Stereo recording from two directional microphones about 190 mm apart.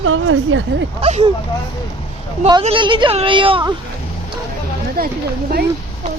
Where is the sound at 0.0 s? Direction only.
90° right.